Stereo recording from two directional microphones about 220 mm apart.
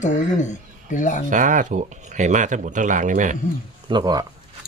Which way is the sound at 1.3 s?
35° right (ahead or behind).